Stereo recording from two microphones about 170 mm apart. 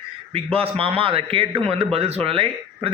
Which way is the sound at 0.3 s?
35° right (ahead or behind).